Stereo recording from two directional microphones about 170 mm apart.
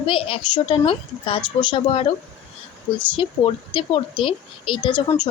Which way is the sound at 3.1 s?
30° left (ahead or behind).